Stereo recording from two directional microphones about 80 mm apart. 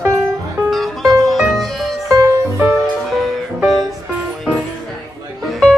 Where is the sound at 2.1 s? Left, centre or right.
Right.